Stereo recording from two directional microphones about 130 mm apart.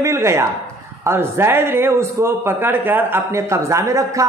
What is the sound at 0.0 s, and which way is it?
A woman's voice, 20° right (ahead or behind).